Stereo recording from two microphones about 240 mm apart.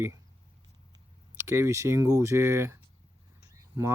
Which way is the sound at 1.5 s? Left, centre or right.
Centre.